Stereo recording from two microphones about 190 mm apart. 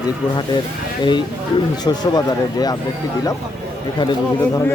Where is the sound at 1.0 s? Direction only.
25° left (ahead or behind).